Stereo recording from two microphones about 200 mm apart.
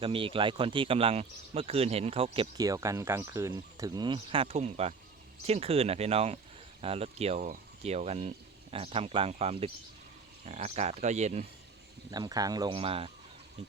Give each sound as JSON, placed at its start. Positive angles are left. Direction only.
{"t": 0.0, "sound": "speech", "side_deg": -25}
{"t": 12.1, "sound": "speech", "side_deg": -20}